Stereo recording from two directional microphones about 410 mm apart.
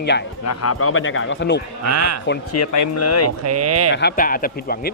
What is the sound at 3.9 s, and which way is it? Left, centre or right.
Speech, left.